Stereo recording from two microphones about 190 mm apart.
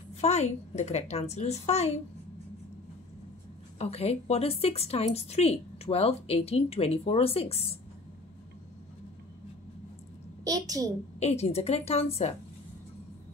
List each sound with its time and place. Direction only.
0.2 s a woman's voice: 35° left (ahead or behind)
3.7 s a woman's voice: 30° left (ahead or behind)
10.4 s a child's voice: 20° right (ahead or behind)
11.1 s a woman's voice: 35° left (ahead or behind)